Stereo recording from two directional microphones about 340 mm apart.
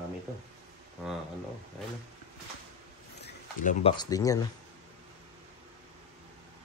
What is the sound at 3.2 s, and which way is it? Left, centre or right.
Speech, left.